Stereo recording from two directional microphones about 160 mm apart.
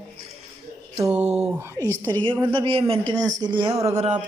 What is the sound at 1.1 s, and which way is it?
A woman's voice, 40° right (ahead or behind).